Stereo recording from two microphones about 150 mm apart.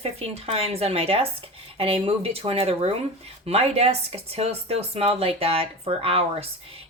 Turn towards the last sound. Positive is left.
turn(degrees=-40)  # may be behind; listen again after turning